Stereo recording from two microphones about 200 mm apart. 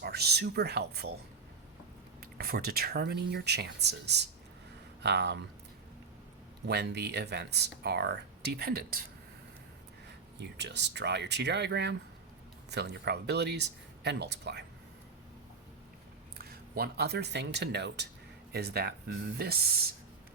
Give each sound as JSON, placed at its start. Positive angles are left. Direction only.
{"t": 0.0, "sound": "speech", "side_deg": -55}
{"t": 2.2, "sound": "speech", "side_deg": -50}
{"t": 6.7, "sound": "speech", "side_deg": -55}
{"t": 10.4, "sound": "speech", "side_deg": -60}
{"t": 16.4, "sound": "speech", "side_deg": -50}